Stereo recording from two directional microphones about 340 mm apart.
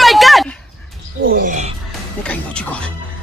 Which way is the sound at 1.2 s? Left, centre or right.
Right.